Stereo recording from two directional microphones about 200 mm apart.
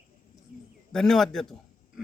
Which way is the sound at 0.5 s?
40° left (ahead or behind).